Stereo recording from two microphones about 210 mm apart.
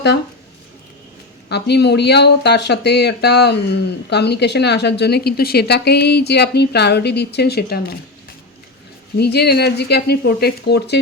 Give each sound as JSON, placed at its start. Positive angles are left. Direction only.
{"t": 1.5, "sound": "speech", "side_deg": 50}
{"t": 9.1, "sound": "speech", "side_deg": 50}